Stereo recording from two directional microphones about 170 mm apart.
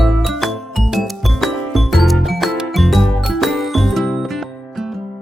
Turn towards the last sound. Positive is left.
turn(degrees=5)  # may be behind; listen again after turning